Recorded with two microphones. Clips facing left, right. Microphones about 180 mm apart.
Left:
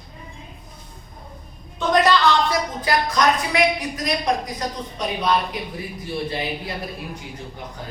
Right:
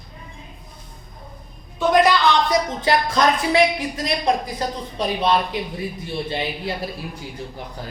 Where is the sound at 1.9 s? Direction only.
10° right (ahead or behind).